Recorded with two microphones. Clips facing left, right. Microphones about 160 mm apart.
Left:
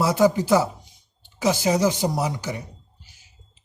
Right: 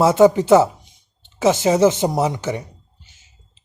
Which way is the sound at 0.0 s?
25° right (ahead or behind).